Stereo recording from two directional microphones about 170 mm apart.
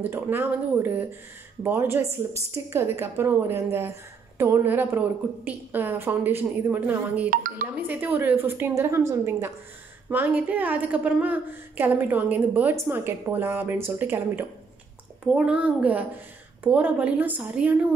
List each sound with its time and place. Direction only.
0.1 s a woman's voice: 15° right (ahead or behind)
7.2 s speech: 55° right (ahead or behind)
7.7 s a woman's voice: 10° right (ahead or behind)